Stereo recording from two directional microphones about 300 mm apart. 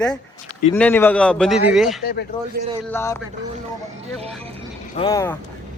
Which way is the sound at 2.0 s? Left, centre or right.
Left.